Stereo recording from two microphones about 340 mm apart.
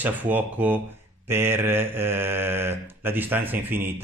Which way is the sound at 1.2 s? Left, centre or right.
Centre.